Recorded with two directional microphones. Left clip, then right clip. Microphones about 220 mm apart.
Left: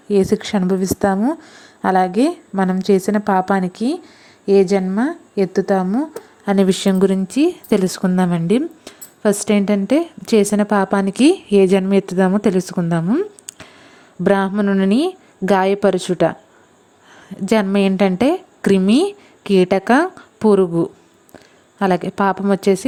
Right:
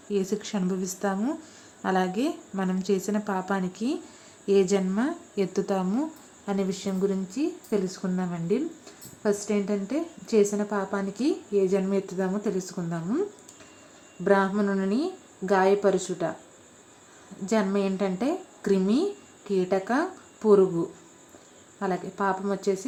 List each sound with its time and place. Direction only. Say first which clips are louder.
0.1 s a woman's voice: left 12 dB; 35° left (ahead or behind)
6.4 s a woman's voice: left 13 dB; 40° left (ahead or behind)
17.4 s a woman's voice: left 9 dB; 40° left (ahead or behind)